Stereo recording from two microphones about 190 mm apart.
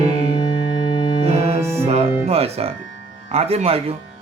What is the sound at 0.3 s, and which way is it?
Music, 20° left (ahead or behind).